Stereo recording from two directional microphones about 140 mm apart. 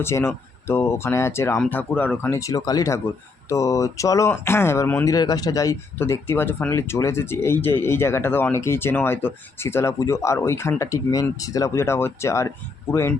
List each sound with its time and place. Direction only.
0.0 s speech: 20° left (ahead or behind)
2.4 s speech: 25° left (ahead or behind)